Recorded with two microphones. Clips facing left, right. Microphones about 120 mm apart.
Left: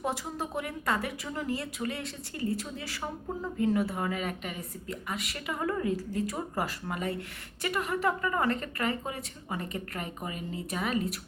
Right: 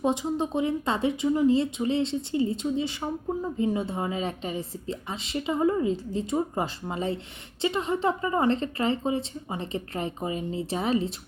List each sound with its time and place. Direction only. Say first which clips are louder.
0.0 s speech: right 8 dB; 20° right (ahead or behind)